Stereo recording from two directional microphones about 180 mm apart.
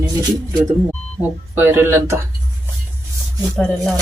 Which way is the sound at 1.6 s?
10° right (ahead or behind).